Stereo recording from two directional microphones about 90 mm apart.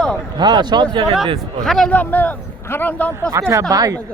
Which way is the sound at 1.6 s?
5° left (ahead or behind).